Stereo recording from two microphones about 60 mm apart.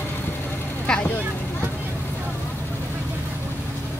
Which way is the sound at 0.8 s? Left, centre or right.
Centre.